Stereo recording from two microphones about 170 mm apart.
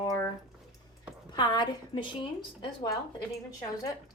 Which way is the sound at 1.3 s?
25° left (ahead or behind).